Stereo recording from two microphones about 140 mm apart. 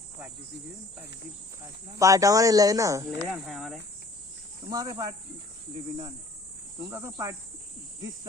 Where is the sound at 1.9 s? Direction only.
25° right (ahead or behind).